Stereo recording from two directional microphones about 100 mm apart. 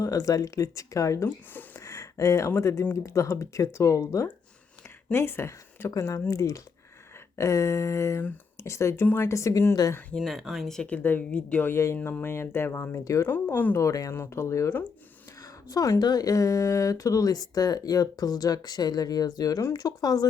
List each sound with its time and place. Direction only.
0.0 s speech: 35° left (ahead or behind)
1.5 s a sound: 30° left (ahead or behind)
2.6 s speech: 30° left (ahead or behind)
5.9 s speech: 35° left (ahead or behind)
10.2 s speech: centre (ahead or behind)
11.7 s speech: 30° left (ahead or behind)
13.7 s speech: 35° left (ahead or behind)